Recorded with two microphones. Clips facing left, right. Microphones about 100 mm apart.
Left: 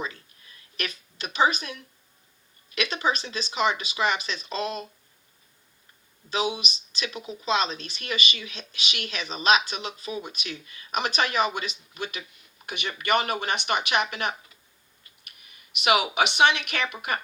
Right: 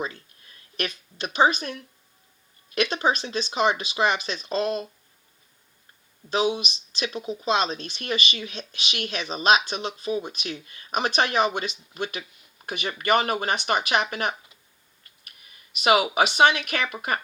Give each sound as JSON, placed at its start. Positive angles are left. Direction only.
{"t": 0.0, "sound": "a sound", "side_deg": -40}
{"t": 2.7, "sound": "speech", "side_deg": -40}
{"t": 6.3, "sound": "speech", "side_deg": -35}
{"t": 15.8, "sound": "speech", "side_deg": -40}